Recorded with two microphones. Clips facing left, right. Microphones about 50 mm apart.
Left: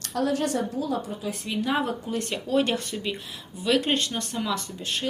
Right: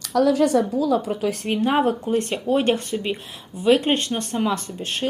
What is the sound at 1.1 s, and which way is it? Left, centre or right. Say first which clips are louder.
Speech: right 8 dB; right.